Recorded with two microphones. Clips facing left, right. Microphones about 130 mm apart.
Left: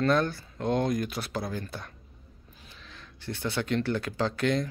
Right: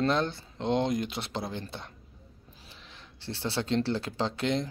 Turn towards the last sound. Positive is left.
turn(degrees=-25)  # may be behind; listen again after turning